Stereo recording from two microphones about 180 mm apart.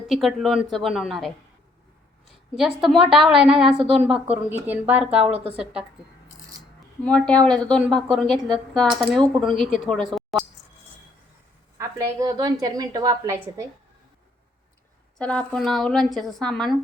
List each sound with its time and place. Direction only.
0.1 s speech: centre (ahead or behind)
2.6 s speech: centre (ahead or behind)
7.0 s speech: 5° left (ahead or behind)
10.3 s a sound: centre (ahead or behind)
11.8 s a woman's voice: 20° right (ahead or behind)
15.2 s speech: 5° left (ahead or behind)